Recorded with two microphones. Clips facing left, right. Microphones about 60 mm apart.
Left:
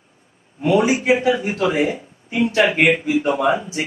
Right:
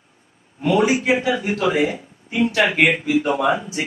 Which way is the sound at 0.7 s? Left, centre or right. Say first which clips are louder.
Left 1 dB; centre.